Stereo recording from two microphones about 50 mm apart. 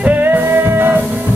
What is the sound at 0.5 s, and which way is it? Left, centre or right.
Music, right.